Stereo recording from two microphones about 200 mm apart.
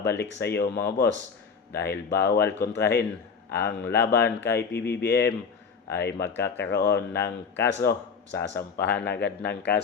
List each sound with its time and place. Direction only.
0.0 s speech: 55° left (ahead or behind)